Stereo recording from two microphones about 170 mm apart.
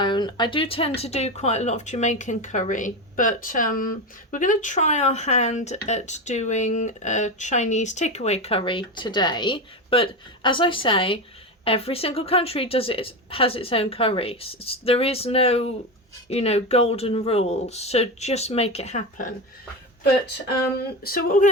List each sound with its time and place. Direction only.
0.0 s speech: 25° left (ahead or behind); by 19.3 s 45° left (ahead or behind)
21.0 s speech: 60° left (ahead or behind)